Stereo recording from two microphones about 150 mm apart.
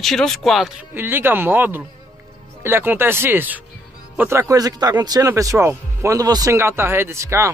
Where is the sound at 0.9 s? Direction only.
15° right (ahead or behind).